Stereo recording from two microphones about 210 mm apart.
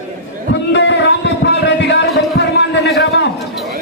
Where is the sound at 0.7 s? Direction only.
55° left (ahead or behind).